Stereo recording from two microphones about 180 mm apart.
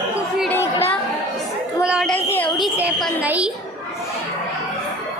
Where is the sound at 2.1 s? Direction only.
10° left (ahead or behind).